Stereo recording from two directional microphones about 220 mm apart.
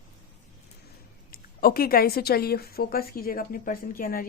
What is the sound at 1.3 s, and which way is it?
A woman's voice, 40° left (ahead or behind).